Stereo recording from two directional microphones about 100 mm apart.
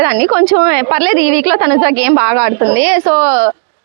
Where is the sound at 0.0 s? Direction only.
20° right (ahead or behind).